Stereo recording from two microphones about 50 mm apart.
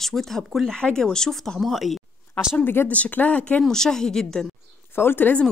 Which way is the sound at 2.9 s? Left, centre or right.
Left.